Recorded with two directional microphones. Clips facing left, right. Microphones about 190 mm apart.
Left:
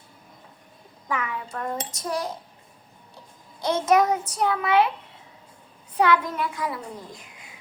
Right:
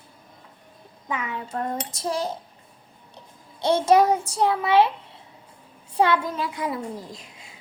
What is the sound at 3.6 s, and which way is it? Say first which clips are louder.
A woman's voice: right 3 dB; 30° right (ahead or behind).